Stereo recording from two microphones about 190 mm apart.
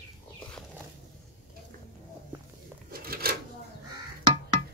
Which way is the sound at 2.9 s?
50° right (ahead or behind).